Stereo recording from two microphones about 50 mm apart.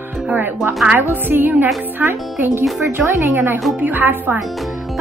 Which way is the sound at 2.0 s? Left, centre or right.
Right.